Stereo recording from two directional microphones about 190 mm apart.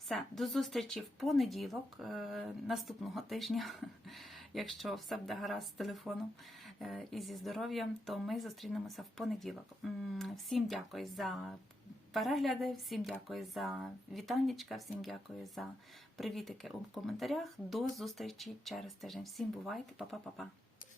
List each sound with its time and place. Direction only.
0.1 s speech: centre (ahead or behind)